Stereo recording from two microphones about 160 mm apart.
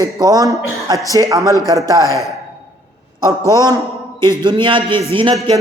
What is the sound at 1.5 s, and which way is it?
Speech, 20° left (ahead or behind).